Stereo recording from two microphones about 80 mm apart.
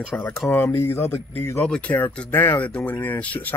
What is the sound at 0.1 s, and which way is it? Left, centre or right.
A man's voice, left.